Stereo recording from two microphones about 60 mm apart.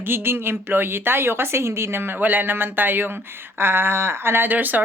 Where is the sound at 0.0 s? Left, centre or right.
Right.